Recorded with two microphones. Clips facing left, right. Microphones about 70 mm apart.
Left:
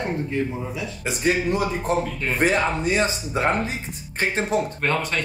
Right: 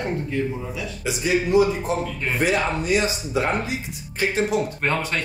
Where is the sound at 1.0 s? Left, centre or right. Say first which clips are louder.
Even; left.